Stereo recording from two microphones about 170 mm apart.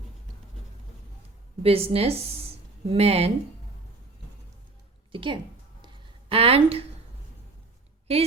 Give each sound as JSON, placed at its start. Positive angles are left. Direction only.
{"t": 1.6, "sound": "a woman's voice", "side_deg": -35}
{"t": 5.1, "sound": "a woman's voice", "side_deg": -30}
{"t": 5.8, "sound": "a sound", "side_deg": -35}